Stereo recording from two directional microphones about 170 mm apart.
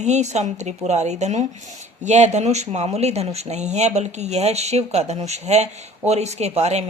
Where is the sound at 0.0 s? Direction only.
40° right (ahead or behind).